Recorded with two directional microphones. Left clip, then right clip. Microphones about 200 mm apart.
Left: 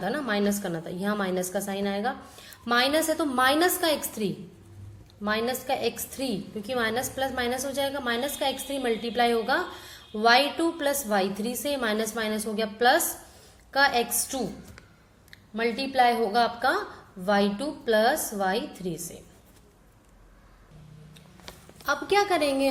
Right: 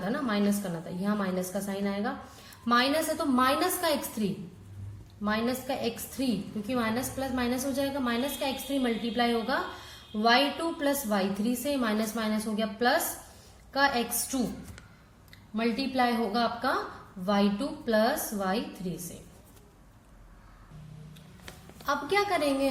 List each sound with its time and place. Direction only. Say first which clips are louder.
0.0 s a woman's voice: left 3 dB; 35° left (ahead or behind)
15.5 s a woman's voice: left 5 dB; 30° left (ahead or behind)
21.8 s a woman's voice: left 4 dB; 35° left (ahead or behind)